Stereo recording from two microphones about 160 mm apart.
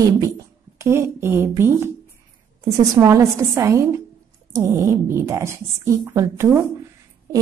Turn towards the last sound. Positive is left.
turn(degrees=-15)  # may be behind; listen again after turning